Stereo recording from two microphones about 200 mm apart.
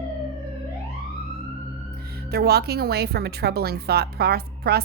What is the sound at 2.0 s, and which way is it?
A woman's voice, 50° right (ahead or behind).